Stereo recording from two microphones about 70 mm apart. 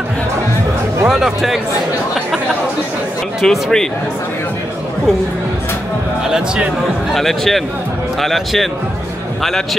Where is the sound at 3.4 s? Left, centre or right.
Centre.